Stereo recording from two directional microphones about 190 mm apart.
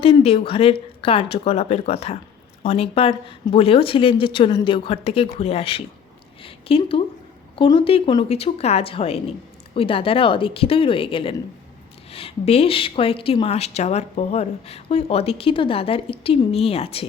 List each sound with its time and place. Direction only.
0.0 s a woman's voice: 30° left (ahead or behind)